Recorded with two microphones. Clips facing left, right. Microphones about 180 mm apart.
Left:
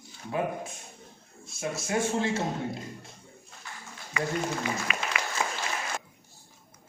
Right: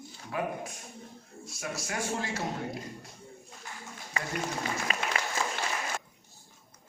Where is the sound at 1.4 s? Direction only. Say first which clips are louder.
Left 4 dB; 25° left (ahead or behind).